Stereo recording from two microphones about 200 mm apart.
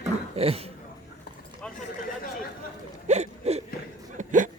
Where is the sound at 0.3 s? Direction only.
30° right (ahead or behind).